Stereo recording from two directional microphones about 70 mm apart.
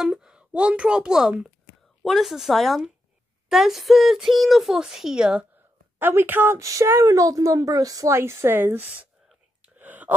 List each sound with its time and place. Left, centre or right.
0.0 s a woman's voice: centre
5.9 s a woman's voice: right
6.6 s speech: right
8.1 s a woman's voice: right
9.8 s whispering: right